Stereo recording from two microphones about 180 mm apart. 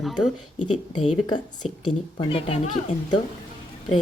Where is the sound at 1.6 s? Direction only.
35° left (ahead or behind).